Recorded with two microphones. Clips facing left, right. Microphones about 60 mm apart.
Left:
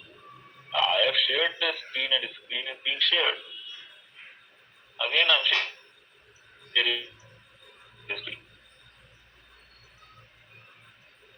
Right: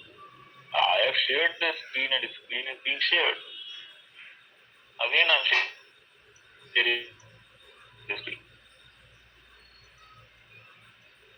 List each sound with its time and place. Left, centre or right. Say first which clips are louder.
0.7 s a sound: right 1 dB; right
1.9 s speech: even; right
4.9 s speech: even; right
6.7 s speech: right 1 dB; right